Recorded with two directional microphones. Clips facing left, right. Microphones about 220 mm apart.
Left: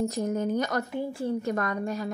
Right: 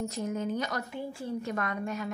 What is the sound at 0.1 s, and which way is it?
A woman's voice, 40° left (ahead or behind).